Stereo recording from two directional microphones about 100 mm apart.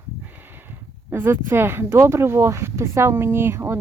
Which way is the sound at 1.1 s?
25° right (ahead or behind).